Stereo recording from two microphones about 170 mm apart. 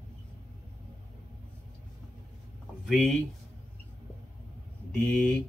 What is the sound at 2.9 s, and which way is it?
Speech, centre (ahead or behind).